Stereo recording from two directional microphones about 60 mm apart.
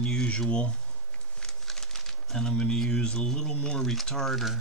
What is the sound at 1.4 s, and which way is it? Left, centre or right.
Speech, centre.